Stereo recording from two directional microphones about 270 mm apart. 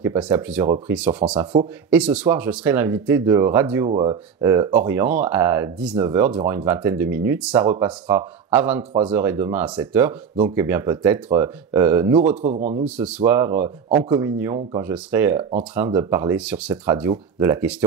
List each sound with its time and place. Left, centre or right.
0.0 s speech: centre
12.4 s a man's voice: right
12.8 s speech: centre